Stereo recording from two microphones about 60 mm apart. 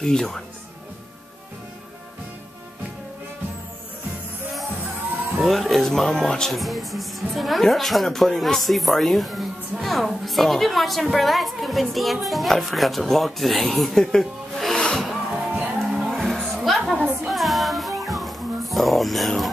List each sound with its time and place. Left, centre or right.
0.0 s speech: centre
5.4 s speech: centre
15.3 s music: right
16.1 s music: centre